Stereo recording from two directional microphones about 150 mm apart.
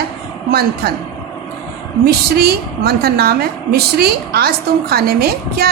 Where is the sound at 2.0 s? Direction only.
90° right.